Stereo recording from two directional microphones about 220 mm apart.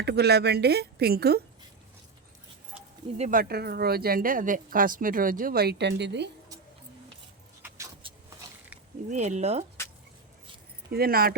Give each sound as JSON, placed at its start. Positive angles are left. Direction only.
{"t": 0.0, "sound": "a woman's voice", "side_deg": -50}
{"t": 3.2, "sound": "speech", "side_deg": -40}
{"t": 8.0, "sound": "a sound", "side_deg": -25}
{"t": 9.0, "sound": "speech", "side_deg": -30}
{"t": 10.9, "sound": "a woman's voice", "side_deg": -45}